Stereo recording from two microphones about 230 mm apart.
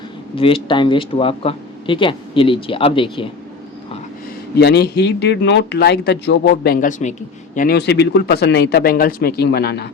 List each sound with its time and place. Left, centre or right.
0.3 s speech: left
4.5 s speech: left